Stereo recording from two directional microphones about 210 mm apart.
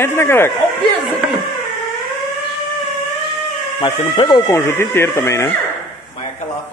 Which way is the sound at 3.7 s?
25° left (ahead or behind).